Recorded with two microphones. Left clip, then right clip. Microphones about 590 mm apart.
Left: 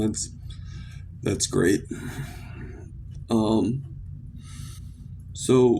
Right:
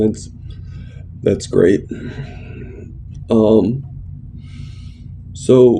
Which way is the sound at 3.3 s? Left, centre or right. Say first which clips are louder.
Right 12 dB; left.